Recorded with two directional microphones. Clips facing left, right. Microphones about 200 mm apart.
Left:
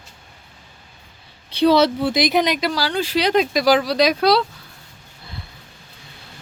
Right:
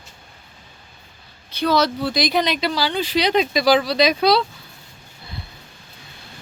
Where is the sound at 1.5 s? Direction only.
30° left (ahead or behind); by 4.5 s 5° left (ahead or behind).